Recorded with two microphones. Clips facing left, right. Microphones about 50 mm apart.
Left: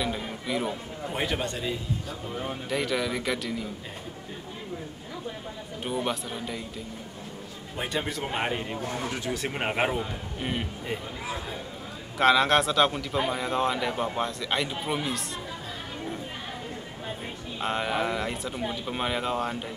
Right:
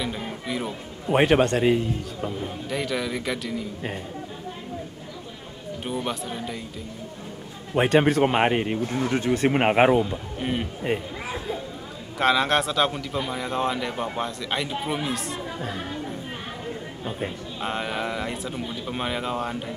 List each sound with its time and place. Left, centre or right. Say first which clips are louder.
0.0 s a sound: right 1 dB; centre
1.1 s speech: right 12 dB; right
2.7 s speech: even; centre
6.0 s speech: right 1 dB; centre
7.7 s speech: right 12 dB; right
8.7 s speech: right 6 dB; centre
9.1 s speech: right 9 dB; right
10.4 s speech: right 4 dB; centre
10.9 s speech: right 8 dB; right
12.2 s speech: even; centre
17.6 s speech: left 1 dB; centre